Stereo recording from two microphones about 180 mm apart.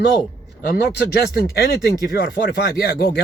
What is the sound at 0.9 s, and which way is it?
Speech, 70° left (ahead or behind).